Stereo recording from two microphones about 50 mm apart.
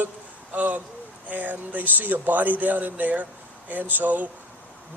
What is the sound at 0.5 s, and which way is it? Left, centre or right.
A man's voice, right.